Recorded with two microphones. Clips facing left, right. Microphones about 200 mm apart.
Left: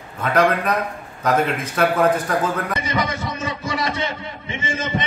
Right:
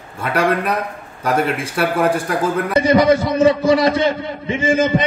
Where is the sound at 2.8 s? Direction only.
30° right (ahead or behind).